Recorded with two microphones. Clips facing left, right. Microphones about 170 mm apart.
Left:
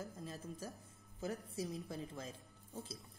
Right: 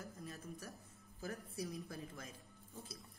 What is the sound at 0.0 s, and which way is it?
A woman's voice, 20° left (ahead or behind).